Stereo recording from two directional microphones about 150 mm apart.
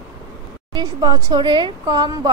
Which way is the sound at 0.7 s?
30° right (ahead or behind).